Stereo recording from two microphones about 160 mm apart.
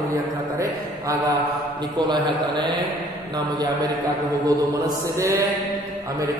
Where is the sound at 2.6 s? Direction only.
30° right (ahead or behind).